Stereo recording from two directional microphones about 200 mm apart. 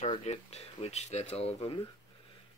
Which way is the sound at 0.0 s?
30° left (ahead or behind).